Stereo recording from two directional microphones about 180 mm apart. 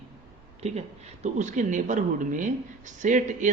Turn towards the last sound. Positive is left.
turn(degrees=-45)  # may be behind; listen again after turning